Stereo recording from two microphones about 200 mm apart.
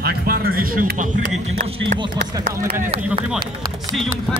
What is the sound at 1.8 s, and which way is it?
Speech, 25° right (ahead or behind).